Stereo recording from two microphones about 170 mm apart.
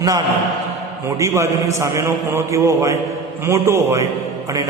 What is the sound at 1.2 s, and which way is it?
A man's voice, 15° right (ahead or behind).